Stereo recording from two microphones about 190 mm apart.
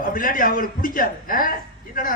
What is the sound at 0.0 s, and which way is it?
A man's voice, 45° left (ahead or behind).